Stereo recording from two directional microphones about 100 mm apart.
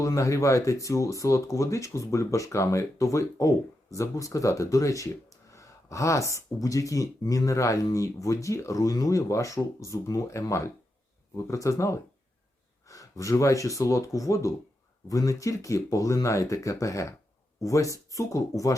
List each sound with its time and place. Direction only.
0.0 s speech: 35° left (ahead or behind)